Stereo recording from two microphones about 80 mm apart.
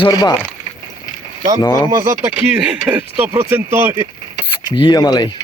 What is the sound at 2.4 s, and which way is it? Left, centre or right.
Speech, centre.